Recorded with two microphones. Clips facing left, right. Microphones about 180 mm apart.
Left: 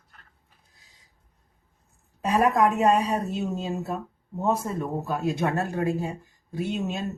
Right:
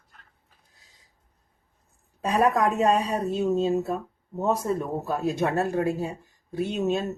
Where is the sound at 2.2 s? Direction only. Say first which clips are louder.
Left 1 dB; 35° right (ahead or behind).